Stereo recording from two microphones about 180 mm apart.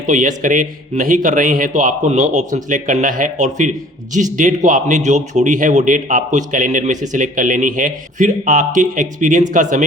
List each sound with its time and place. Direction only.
0.1 s speech: 45° right (ahead or behind)